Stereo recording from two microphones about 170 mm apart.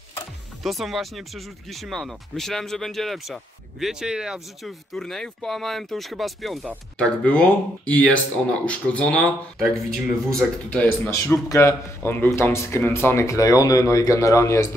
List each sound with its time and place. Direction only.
0.7 s speech: centre (ahead or behind); by 14.7 s 15° left (ahead or behind)